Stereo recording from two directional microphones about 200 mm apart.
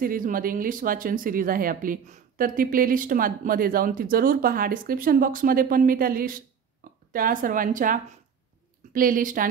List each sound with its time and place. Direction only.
0.0 s speech: 45° right (ahead or behind)